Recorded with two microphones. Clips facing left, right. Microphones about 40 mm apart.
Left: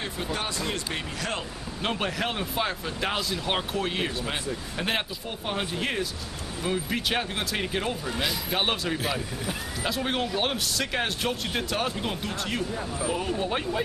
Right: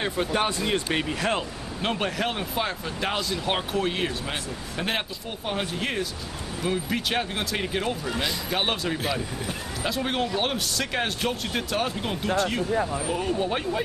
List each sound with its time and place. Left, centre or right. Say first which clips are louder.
0.0 s speech: right 6 dB; right
1.8 s speech: right 2 dB; centre